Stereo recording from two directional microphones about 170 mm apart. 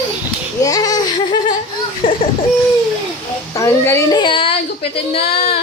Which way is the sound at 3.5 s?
20° left (ahead or behind).